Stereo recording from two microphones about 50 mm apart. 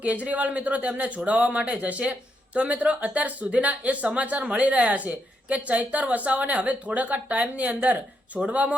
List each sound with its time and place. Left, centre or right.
0.0 s speech: right